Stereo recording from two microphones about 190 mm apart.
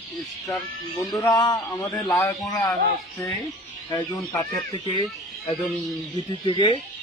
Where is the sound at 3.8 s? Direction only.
20° left (ahead or behind).